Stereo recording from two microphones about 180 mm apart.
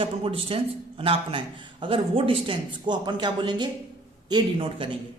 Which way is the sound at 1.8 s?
30° right (ahead or behind).